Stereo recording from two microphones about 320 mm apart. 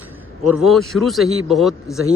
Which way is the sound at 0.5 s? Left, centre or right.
Centre.